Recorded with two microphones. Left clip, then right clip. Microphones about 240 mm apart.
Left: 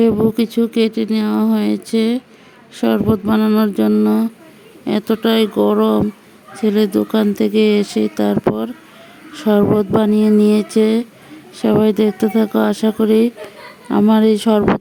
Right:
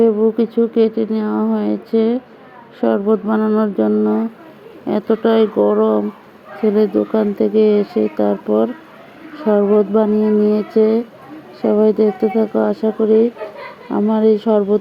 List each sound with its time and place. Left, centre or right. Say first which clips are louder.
0.0 s speech: right 1 dB; left